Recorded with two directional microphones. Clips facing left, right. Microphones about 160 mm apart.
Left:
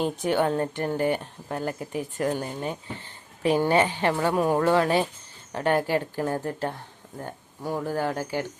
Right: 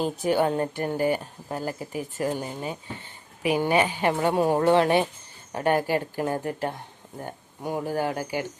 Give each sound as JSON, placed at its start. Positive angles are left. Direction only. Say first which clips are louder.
{"t": 0.0, "sound": "a woman's voice", "louder": "right 1 dB", "side_deg": -5}